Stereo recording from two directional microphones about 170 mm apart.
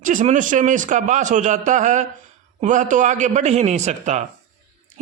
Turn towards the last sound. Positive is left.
turn(degrees=-45)  # may be behind; listen again after turning